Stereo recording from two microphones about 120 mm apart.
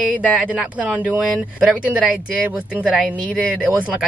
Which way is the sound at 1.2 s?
Centre (ahead or behind).